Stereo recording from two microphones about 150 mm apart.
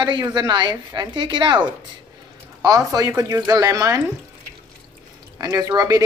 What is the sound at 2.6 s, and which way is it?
A woman's voice, 25° right (ahead or behind).